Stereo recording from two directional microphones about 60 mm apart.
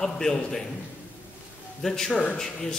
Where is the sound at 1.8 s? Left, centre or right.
Centre.